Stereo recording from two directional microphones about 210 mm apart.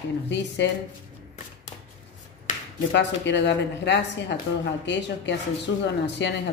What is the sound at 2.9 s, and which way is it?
Speech, 55° left (ahead or behind).